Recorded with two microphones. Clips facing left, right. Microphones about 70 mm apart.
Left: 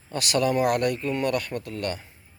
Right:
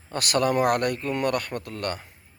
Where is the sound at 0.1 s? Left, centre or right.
Right.